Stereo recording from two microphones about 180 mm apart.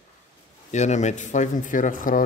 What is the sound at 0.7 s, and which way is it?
Speech, 40° left (ahead or behind).